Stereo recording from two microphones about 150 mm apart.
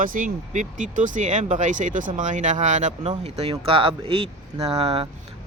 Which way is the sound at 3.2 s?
45° right (ahead or behind).